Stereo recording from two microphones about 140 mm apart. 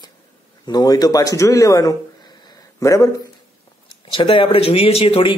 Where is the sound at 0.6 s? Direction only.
30° left (ahead or behind).